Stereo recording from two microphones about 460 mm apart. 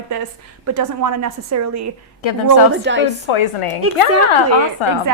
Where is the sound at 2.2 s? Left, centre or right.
Left.